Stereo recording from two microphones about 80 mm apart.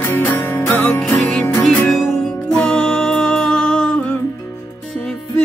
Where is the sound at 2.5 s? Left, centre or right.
Centre.